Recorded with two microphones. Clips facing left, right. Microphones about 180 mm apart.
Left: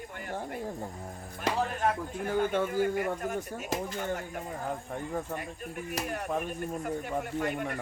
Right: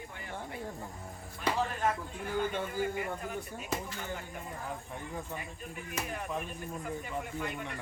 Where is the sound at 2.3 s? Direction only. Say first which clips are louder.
Left 5 dB; 55° left (ahead or behind).